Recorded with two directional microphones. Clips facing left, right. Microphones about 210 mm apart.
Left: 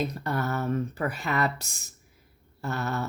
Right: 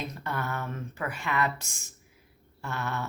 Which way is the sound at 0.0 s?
40° left (ahead or behind).